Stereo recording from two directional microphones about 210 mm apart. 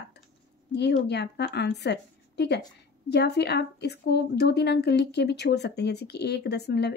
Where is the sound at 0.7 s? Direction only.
55° left (ahead or behind).